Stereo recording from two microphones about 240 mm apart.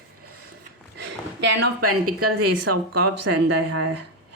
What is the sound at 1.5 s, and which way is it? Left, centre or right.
Speech, right.